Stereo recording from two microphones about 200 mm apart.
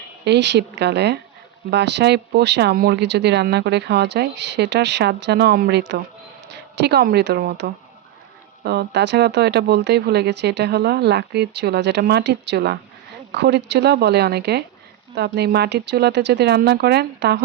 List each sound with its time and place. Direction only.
0.3 s a woman's voice: 60° right (ahead or behind)